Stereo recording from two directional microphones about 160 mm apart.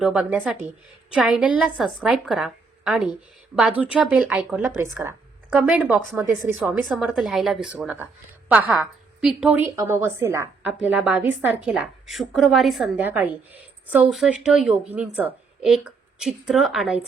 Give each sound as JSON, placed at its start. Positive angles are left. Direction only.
{"t": 0.0, "sound": "a woman's voice", "side_deg": -5}